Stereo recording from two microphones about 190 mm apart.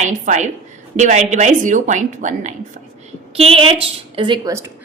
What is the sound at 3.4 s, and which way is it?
A woman's voice, 30° right (ahead or behind).